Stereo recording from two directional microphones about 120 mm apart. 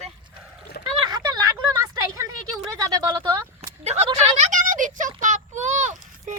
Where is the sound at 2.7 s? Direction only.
25° right (ahead or behind).